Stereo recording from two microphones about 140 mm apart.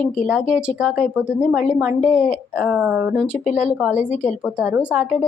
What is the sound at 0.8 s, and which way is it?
A woman's voice, 10° right (ahead or behind).